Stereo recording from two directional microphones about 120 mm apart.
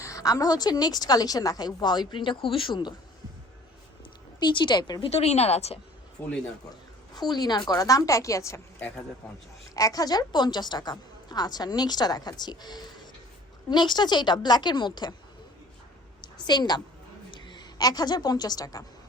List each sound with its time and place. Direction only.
0.0 s a woman's voice: 30° left (ahead or behind)
4.4 s a woman's voice: 40° left (ahead or behind)
5.0 s speech: 60° left (ahead or behind)
6.2 s a man's voice: 15° left (ahead or behind)
7.1 s a woman's voice: 35° left (ahead or behind)
9.7 s a woman's voice: 30° left (ahead or behind)
16.2 s a woman's voice: 35° left (ahead or behind)